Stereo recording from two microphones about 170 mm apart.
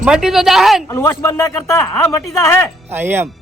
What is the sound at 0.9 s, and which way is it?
A man's voice, 15° left (ahead or behind).